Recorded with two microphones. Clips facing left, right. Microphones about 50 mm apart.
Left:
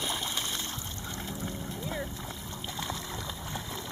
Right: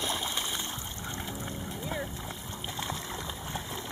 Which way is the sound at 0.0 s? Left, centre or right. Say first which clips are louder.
Right 1 dB; centre.